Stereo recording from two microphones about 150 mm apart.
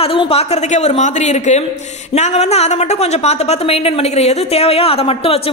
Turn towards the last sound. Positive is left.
turn(degrees=40)  # may be behind; listen again after turning